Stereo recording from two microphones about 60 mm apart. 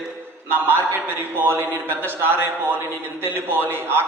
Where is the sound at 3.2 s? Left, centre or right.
Right.